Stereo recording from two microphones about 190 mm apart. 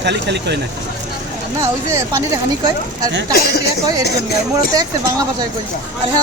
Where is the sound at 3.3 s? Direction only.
55° left (ahead or behind).